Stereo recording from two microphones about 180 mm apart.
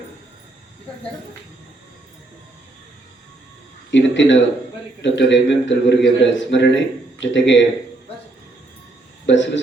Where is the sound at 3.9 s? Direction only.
90° left.